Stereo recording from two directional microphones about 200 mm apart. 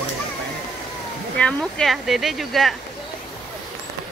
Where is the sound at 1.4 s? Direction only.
5° left (ahead or behind).